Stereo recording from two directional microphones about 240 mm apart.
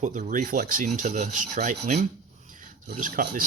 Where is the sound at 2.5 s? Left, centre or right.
Right.